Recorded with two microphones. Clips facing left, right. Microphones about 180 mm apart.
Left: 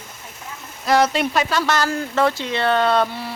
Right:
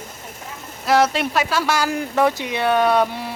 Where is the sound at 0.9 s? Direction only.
5° right (ahead or behind).